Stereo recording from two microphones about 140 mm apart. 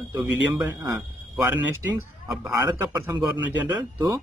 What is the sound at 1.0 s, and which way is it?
Speech, 10° right (ahead or behind).